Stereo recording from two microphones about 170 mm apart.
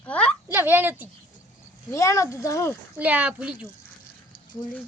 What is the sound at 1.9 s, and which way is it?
Speech, 20° left (ahead or behind).